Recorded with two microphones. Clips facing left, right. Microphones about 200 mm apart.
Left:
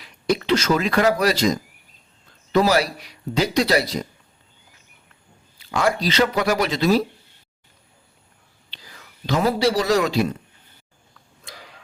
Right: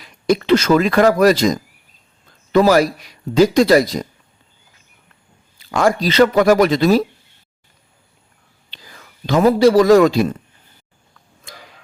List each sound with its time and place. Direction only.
0.0 s speech: 50° right (ahead or behind)
5.7 s speech: 45° right (ahead or behind)
9.2 s speech: 50° right (ahead or behind)